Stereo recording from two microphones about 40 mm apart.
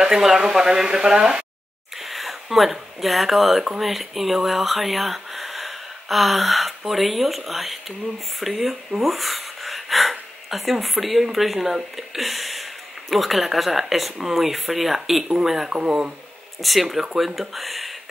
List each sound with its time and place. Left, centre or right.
0.0 s speech: centre
2.0 s speech: centre